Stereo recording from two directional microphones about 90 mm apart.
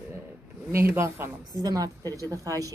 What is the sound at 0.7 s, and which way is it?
Speech, 25° right (ahead or behind).